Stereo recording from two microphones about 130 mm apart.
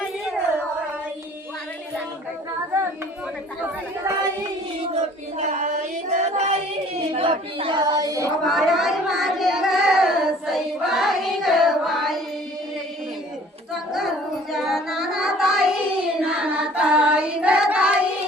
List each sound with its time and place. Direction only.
4.0 s child singing: 25° right (ahead or behind)
4.9 s child singing: 65° right (ahead or behind)
6.1 s singing: 65° right (ahead or behind)
7.1 s child singing: 45° right (ahead or behind); by 8.3 s 25° right (ahead or behind)
8.4 s child singing: centre (ahead or behind)
14.5 s music: centre (ahead or behind)
16.1 s singing: 5° right (ahead or behind)